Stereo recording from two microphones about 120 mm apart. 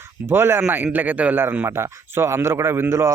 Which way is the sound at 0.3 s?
20° right (ahead or behind).